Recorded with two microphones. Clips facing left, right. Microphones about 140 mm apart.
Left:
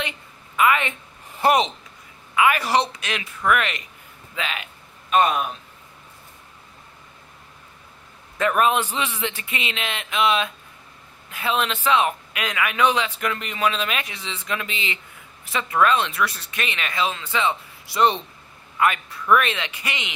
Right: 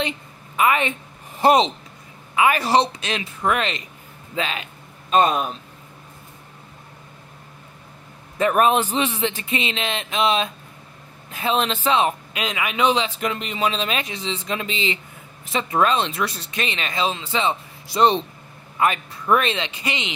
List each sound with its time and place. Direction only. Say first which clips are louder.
0.6 s speech: right 1 dB; 30° right (ahead or behind)
8.4 s speech: right 2 dB; 30° right (ahead or behind)